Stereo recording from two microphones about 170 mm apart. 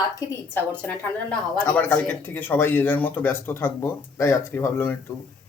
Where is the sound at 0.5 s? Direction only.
10° left (ahead or behind).